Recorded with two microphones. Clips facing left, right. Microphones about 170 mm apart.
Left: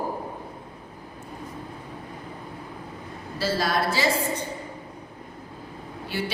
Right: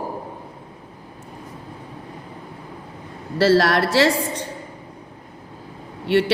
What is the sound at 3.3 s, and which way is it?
A woman's voice, 80° right.